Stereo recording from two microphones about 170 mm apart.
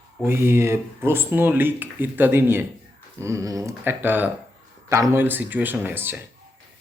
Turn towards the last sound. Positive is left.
turn(degrees=-10)  # may be behind; listen again after turning